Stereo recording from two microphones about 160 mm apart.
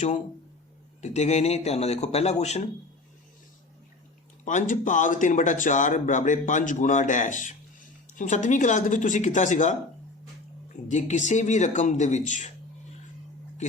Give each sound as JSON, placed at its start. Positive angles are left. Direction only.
{"t": 1.0, "sound": "speech", "side_deg": 45}
{"t": 4.4, "sound": "speech", "side_deg": 55}
{"t": 10.8, "sound": "speech", "side_deg": 50}